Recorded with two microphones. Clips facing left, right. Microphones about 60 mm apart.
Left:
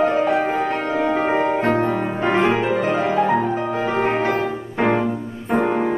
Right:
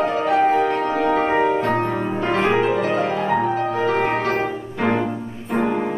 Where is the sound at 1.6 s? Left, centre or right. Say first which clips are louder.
Left 1 dB; left.